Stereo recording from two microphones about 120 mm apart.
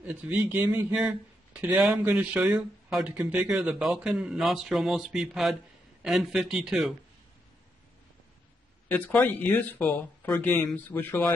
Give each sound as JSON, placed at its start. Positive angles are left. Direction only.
{"t": 0.0, "sound": "speech", "side_deg": -10}
{"t": 8.9, "sound": "speech", "side_deg": 15}